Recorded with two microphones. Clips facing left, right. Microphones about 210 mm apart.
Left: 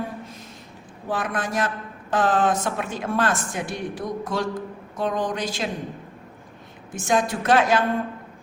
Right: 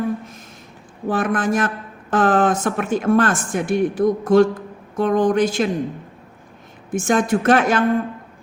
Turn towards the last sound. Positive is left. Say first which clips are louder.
# right 4 dB
turn(degrees=-50)  # may be behind; listen again after turning